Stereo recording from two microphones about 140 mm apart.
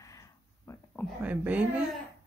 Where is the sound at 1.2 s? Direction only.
10° right (ahead or behind).